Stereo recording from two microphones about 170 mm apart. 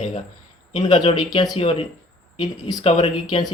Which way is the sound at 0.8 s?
25° left (ahead or behind).